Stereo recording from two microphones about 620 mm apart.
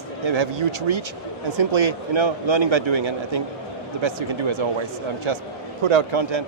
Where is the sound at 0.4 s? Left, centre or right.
Right.